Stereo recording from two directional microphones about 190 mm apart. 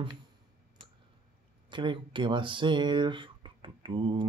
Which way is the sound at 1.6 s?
25° right (ahead or behind).